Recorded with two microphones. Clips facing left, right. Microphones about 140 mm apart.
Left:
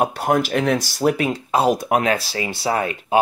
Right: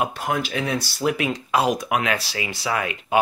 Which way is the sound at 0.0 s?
45° left (ahead or behind).